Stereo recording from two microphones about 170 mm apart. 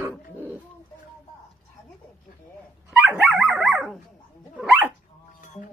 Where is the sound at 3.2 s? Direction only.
Centre (ahead or behind).